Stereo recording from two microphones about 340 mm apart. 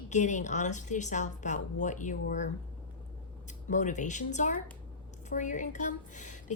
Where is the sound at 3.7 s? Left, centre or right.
Left.